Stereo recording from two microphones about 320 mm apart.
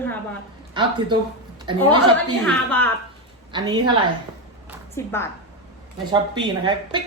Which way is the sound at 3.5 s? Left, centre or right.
Centre.